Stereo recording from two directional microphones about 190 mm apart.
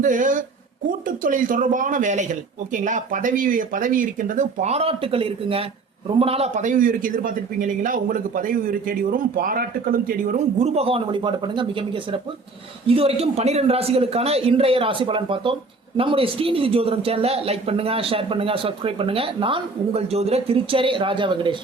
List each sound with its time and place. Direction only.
0.0 s a man's voice: 45° right (ahead or behind); by 21.5 s 25° right (ahead or behind)